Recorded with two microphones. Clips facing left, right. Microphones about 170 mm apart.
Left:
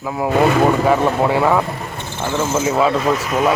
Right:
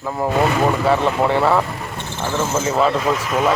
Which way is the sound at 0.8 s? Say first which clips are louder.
Left 2 dB; 10° left (ahead or behind).